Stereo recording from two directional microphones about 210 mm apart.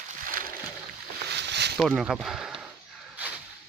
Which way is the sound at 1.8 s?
Centre (ahead or behind).